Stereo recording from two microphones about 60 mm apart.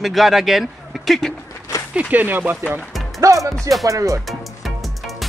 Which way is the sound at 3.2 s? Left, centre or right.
Right.